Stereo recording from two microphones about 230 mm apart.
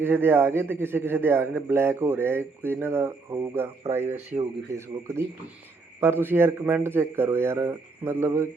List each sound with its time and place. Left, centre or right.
0.0 s a man's voice: centre